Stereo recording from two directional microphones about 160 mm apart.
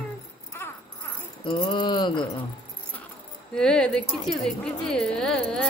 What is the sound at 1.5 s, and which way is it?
Mantra, 30° left (ahead or behind).